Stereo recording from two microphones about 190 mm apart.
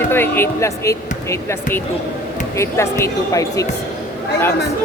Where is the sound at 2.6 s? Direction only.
15° left (ahead or behind).